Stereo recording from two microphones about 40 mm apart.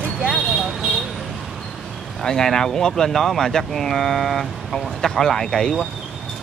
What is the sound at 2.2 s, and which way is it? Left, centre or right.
Speech, centre.